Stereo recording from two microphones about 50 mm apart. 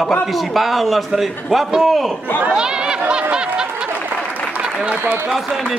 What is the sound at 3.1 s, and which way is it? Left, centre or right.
Snicker, centre.